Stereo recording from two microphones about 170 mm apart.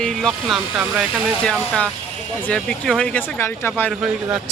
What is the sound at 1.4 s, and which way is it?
Speech, 5° left (ahead or behind).